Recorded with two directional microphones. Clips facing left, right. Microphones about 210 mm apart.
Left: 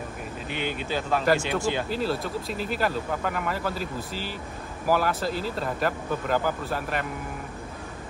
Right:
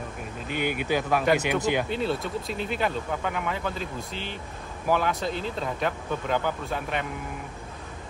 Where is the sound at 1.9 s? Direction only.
Centre (ahead or behind).